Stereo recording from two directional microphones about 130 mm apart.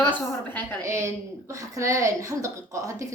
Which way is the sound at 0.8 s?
20° right (ahead or behind).